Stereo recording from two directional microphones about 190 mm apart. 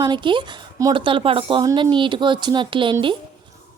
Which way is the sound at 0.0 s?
25° right (ahead or behind).